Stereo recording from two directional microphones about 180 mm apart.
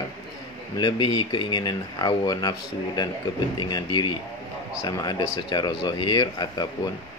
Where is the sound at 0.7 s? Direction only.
25° left (ahead or behind).